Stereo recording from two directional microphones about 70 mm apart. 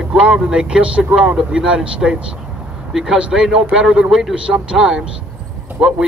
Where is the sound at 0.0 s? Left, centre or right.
Centre.